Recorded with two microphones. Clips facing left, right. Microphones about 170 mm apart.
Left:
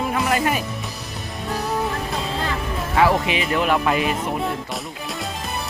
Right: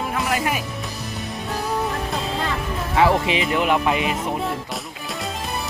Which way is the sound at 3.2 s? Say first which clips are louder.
Right 1 dB; 20° right (ahead or behind).